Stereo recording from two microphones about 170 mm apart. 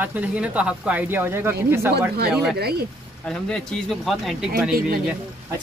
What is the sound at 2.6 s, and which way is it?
Speech, 65° right (ahead or behind).